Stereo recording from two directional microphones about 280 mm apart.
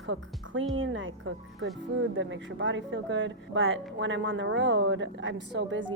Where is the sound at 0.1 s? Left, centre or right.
Right.